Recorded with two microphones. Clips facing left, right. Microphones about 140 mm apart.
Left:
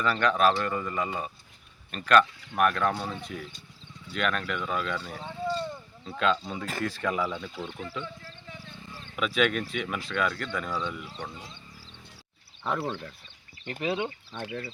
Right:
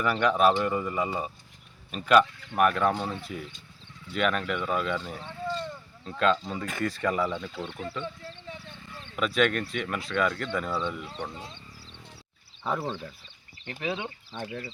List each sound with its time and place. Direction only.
0.0 s speech: 10° right (ahead or behind)
5.2 s a sound: 10° left (ahead or behind)
5.6 s speech: 5° left (ahead or behind)
9.1 s speech: centre (ahead or behind)
12.6 s speech: 5° right (ahead or behind)
13.7 s speech: 15° left (ahead or behind)